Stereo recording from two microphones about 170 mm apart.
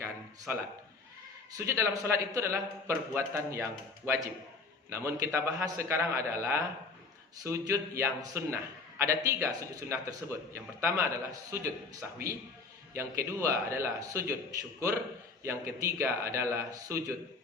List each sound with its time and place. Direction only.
0.5 s a man's voice: 10° right (ahead or behind)
15.4 s a man's voice: 15° right (ahead or behind)